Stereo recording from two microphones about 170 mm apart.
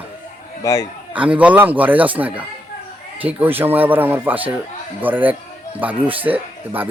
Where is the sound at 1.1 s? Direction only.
10° right (ahead or behind).